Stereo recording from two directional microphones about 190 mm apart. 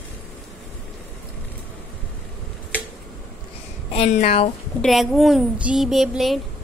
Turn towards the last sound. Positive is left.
turn(degrees=0)  # may be behind; listen again after turning